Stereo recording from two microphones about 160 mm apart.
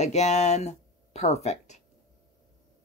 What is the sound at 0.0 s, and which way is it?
Speech, 45° left (ahead or behind).